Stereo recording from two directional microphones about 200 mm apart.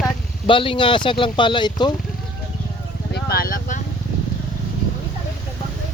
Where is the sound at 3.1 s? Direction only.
50° left (ahead or behind).